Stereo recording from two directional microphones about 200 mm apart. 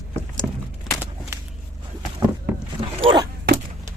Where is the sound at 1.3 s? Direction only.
15° right (ahead or behind).